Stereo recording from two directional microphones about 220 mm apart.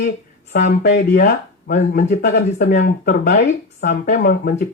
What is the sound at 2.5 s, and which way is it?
Speech, 50° left (ahead or behind).